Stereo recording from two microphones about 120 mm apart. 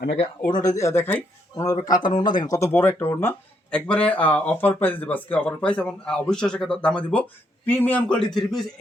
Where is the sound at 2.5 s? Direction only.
20° left (ahead or behind).